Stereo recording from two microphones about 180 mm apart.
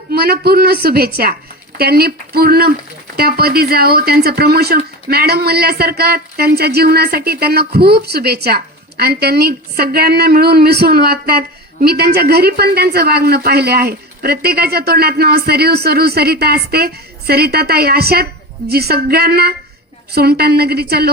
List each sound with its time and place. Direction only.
0.1 s speech: 60° right (ahead or behind)